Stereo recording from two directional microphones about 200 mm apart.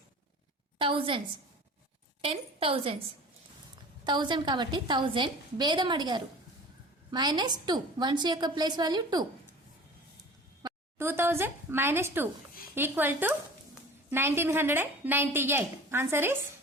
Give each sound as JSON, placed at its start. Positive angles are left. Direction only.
{"t": 0.8, "sound": "a woman's voice", "side_deg": -25}
{"t": 2.2, "sound": "a woman's voice", "side_deg": -25}
{"t": 4.0, "sound": "a woman's voice", "side_deg": -25}
{"t": 10.6, "sound": "speech", "side_deg": -15}